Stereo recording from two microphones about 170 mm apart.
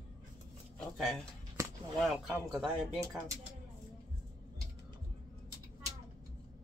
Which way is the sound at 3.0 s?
20° right (ahead or behind).